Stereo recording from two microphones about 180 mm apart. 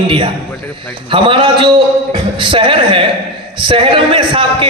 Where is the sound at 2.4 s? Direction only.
30° right (ahead or behind).